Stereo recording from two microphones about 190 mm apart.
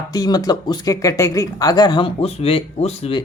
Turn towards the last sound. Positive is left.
turn(degrees=30)  # may be behind; listen again after turning